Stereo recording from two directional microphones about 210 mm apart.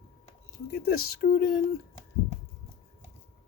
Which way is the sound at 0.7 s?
45° left (ahead or behind).